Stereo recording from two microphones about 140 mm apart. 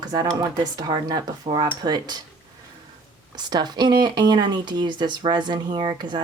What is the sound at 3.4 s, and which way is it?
Speech, 30° right (ahead or behind).